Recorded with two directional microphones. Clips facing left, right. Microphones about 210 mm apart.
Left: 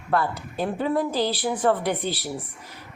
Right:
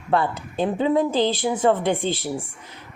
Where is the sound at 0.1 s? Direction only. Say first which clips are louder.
Right 3 dB; 25° right (ahead or behind).